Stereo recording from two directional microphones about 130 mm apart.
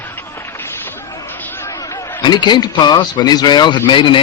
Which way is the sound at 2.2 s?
35° left (ahead or behind).